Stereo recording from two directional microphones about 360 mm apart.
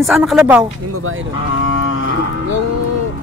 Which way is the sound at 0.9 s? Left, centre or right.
Right.